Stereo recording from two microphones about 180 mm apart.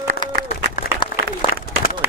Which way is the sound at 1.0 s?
25° left (ahead or behind).